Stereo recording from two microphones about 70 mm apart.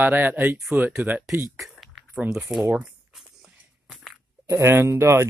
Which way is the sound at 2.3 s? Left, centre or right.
Centre.